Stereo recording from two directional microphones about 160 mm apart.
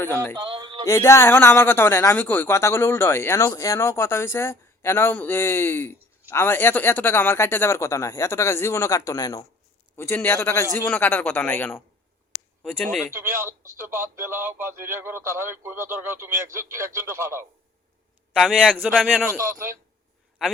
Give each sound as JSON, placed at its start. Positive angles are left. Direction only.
{"t": 0.0, "sound": "a man's voice", "side_deg": 15}
{"t": 0.3, "sound": "a sound", "side_deg": -30}
{"t": 0.9, "sound": "a man's voice", "side_deg": 20}
{"t": 13.1, "sound": "speech", "side_deg": -15}
{"t": 18.3, "sound": "a man's voice", "side_deg": 0}